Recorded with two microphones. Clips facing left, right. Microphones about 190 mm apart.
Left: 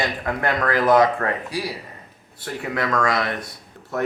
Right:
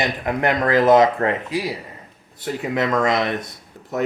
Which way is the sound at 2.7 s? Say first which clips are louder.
Right 3 dB; 20° right (ahead or behind).